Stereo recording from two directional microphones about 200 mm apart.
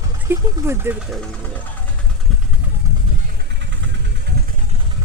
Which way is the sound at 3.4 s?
65° right (ahead or behind).